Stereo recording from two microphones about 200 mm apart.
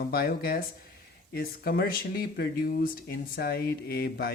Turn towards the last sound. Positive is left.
turn(degrees=50)  # may be behind; listen again after turning